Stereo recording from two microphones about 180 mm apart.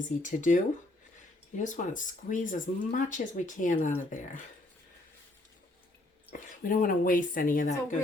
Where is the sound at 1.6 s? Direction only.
45° left (ahead or behind).